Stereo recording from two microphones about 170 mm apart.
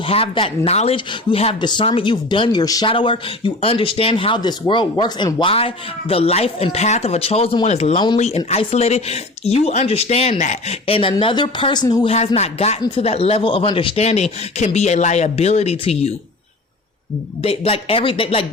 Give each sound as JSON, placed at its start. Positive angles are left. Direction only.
{"t": 0.1, "sound": "speech", "side_deg": 35}
{"t": 12.0, "sound": "speech", "side_deg": 35}
{"t": 17.4, "sound": "speech", "side_deg": 35}